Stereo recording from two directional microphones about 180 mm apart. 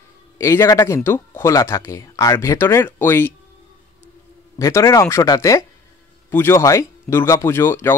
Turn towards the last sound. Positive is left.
turn(degrees=15)  # may be behind; listen again after turning